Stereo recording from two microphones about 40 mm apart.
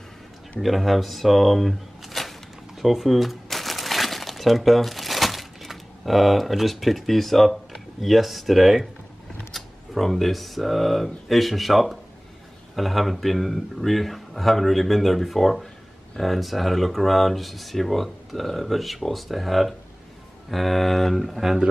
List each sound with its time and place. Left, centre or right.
0.6 s speech: centre
2.8 s crumpling: centre
9.5 s speech: centre